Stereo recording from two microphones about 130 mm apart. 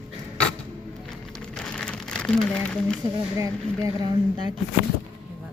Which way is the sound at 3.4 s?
25° right (ahead or behind).